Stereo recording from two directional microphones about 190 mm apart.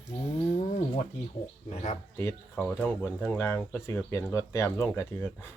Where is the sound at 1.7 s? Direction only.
35° left (ahead or behind).